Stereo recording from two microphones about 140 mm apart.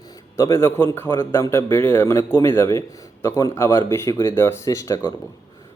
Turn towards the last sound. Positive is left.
turn(degrees=20)  # may be behind; listen again after turning